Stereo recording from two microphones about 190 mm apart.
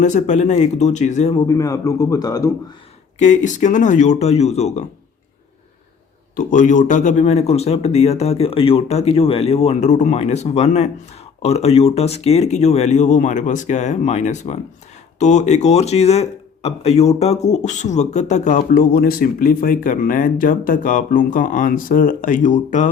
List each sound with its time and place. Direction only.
0.0 s speech: 40° left (ahead or behind)
1.3 s speech: 20° left (ahead or behind)
3.2 s speech: 40° left (ahead or behind)
6.3 s speech: 45° left (ahead or behind)